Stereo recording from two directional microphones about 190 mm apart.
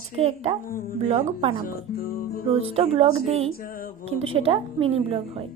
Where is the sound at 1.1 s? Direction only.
30° right (ahead or behind).